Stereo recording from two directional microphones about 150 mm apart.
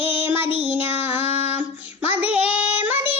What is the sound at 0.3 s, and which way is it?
Child singing, 10° right (ahead or behind).